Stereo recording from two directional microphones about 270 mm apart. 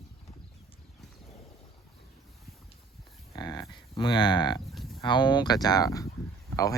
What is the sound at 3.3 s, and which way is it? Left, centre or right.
Livestock, centre.